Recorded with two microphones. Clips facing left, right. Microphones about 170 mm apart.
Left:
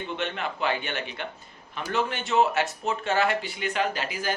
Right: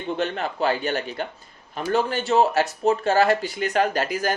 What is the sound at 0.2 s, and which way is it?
Speech, 40° right (ahead or behind).